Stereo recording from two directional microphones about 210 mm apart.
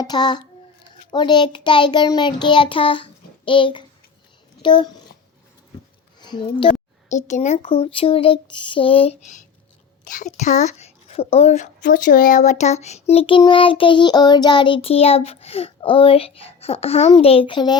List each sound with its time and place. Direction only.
0.0 s a woman's voice: 20° left (ahead or behind)
6.1 s speech: 20° left (ahead or behind)
7.1 s a woman's voice: 35° left (ahead or behind)